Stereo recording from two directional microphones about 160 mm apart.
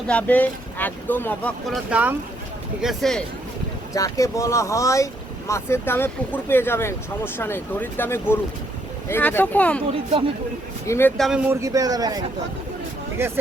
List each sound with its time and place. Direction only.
0.1 s speech: 10° left (ahead or behind)
1.6 s speech: 5° right (ahead or behind)
2.8 s speech: centre (ahead or behind)
3.9 s speech: 20° left (ahead or behind)
10.1 s speech: 35° right (ahead or behind)
10.8 s speech: 15° left (ahead or behind)
11.4 s speech: 20° right (ahead or behind)